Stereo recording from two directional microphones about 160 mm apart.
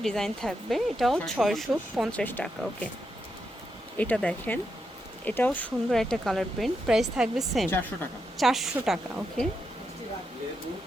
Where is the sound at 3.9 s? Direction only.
10° left (ahead or behind).